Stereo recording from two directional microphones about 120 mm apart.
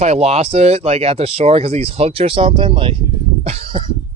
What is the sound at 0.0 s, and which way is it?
Speech, 60° right (ahead or behind).